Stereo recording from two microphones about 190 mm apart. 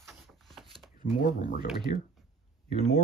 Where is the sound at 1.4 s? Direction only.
40° left (ahead or behind).